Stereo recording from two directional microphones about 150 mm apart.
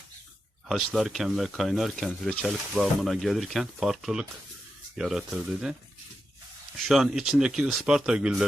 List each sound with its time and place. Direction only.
0.7 s speech: centre (ahead or behind)
6.7 s speech: centre (ahead or behind)